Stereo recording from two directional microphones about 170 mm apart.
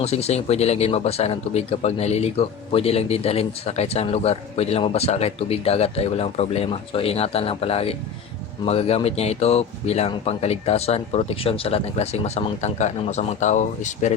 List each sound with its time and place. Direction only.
0.0 s speech: 40° left (ahead or behind)